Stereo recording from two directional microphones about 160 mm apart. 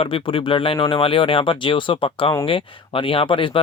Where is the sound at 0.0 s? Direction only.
35° left (ahead or behind).